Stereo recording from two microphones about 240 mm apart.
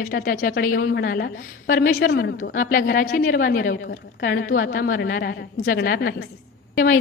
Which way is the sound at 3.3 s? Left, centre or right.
Left.